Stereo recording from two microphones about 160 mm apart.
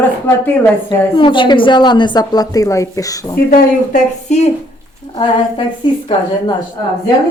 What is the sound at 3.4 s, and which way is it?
Speech, 55° left (ahead or behind).